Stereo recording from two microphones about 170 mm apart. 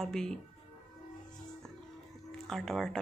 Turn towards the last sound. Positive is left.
turn(degrees=0)  # may be behind; listen again after turning